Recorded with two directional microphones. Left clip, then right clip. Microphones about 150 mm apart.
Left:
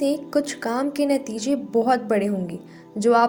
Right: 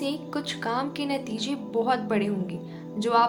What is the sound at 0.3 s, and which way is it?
A woman's voice, 55° left (ahead or behind).